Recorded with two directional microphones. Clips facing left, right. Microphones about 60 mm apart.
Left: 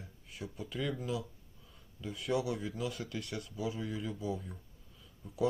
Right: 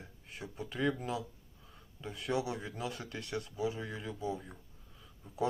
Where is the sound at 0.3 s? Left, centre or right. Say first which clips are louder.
Even; right.